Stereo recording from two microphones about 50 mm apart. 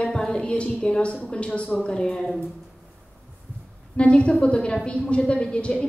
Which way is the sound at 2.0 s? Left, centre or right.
Centre.